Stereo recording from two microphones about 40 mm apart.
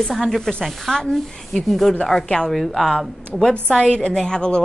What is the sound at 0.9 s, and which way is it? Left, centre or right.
Speech, centre.